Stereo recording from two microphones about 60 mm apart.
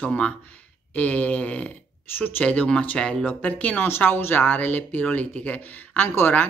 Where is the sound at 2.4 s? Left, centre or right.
Centre.